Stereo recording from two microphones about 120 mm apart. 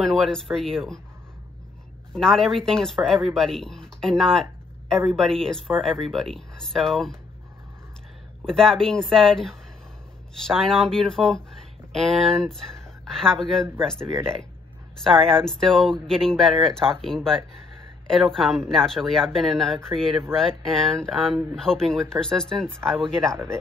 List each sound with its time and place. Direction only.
0.0 s speech: centre (ahead or behind)
2.1 s speech: 5° left (ahead or behind)
8.5 s speech: 5° left (ahead or behind)
15.0 s speech: 5° left (ahead or behind)
23.2 s speech: 20° right (ahead or behind)